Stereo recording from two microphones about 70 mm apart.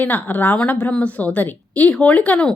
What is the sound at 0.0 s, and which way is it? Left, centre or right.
A woman's voice, left.